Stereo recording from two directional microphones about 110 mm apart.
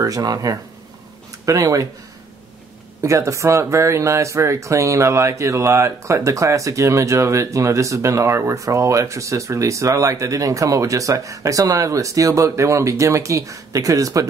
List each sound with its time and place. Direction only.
0.0 s speech: 35° right (ahead or behind)
3.0 s speech: 30° right (ahead or behind)